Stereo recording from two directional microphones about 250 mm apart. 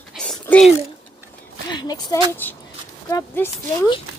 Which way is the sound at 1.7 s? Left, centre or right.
Centre.